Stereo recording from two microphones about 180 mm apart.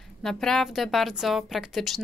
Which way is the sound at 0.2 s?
Centre (ahead or behind).